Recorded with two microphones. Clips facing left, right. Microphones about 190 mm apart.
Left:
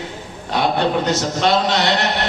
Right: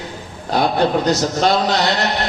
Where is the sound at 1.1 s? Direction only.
40° right (ahead or behind).